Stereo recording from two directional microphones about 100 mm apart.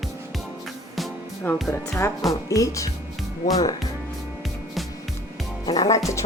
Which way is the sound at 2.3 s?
35° left (ahead or behind).